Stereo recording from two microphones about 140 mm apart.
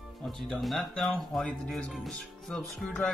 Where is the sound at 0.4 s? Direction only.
Centre (ahead or behind).